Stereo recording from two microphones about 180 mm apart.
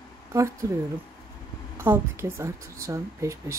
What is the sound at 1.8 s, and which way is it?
Speech, 10° right (ahead or behind).